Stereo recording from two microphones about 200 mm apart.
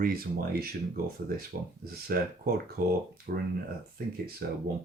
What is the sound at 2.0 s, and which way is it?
Speech, 50° right (ahead or behind).